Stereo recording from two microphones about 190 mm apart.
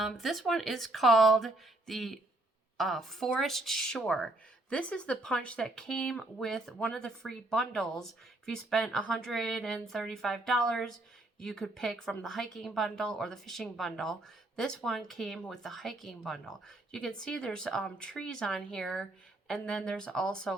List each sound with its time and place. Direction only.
0.0 s speech: centre (ahead or behind)